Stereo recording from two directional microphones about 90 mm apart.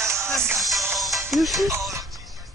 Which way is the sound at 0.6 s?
Centre (ahead or behind).